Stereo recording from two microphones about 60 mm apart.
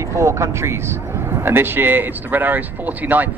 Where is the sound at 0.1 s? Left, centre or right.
Right.